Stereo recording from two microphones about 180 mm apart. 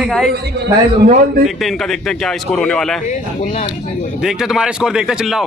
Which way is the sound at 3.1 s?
45° left (ahead or behind).